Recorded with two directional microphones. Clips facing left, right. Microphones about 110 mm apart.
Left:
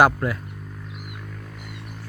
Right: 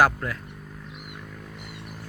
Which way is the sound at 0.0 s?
15° left (ahead or behind).